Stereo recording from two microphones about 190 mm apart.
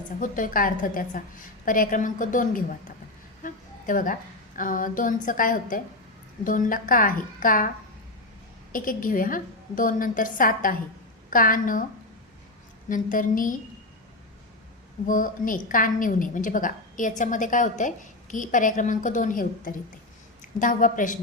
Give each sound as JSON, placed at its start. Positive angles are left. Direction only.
{"t": 0.2, "sound": "a woman's voice", "side_deg": 45}
{"t": 8.7, "sound": "a woman's voice", "side_deg": 45}
{"t": 12.9, "sound": "a woman's voice", "side_deg": 45}
{"t": 15.0, "sound": "a woman's voice", "side_deg": 45}